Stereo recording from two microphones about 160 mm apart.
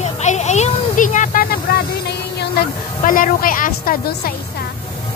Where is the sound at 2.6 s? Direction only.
60° left (ahead or behind).